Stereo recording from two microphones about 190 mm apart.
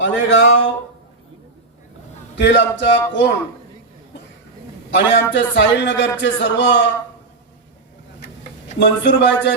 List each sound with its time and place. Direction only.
0.0 s speech: 75° left (ahead or behind)
2.4 s speech: 70° left (ahead or behind)
4.9 s speech: 70° left (ahead or behind)
8.8 s speech: 70° left (ahead or behind)